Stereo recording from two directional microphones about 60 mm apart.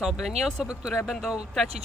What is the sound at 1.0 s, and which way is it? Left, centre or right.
Speech, centre.